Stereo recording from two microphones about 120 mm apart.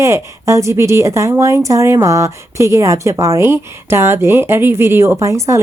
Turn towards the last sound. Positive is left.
turn(degrees=-25)  # may be behind; listen again after turning